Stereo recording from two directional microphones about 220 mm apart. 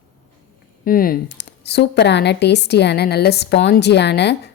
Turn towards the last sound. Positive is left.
turn(degrees=50)  # may be behind; listen again after turning